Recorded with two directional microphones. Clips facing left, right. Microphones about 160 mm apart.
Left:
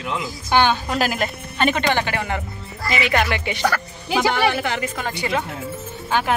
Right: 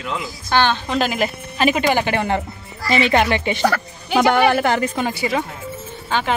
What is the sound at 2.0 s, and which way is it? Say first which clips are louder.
Speech: right 5 dB; 30° right (ahead or behind).